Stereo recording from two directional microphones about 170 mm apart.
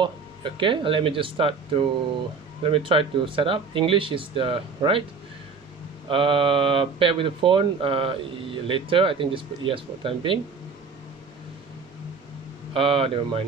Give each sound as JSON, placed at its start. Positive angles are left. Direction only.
{"t": 0.0, "sound": "speech", "side_deg": -30}
{"t": 6.0, "sound": "speech", "side_deg": -30}
{"t": 12.7, "sound": "speech", "side_deg": -30}